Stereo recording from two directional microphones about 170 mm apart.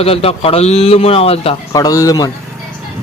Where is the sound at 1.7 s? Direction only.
20° left (ahead or behind).